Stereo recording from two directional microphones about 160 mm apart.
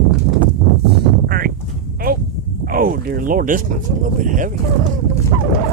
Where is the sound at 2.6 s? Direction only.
60° right (ahead or behind).